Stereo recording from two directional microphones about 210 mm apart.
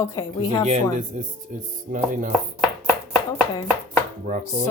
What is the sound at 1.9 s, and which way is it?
Chopping, 40° right (ahead or behind).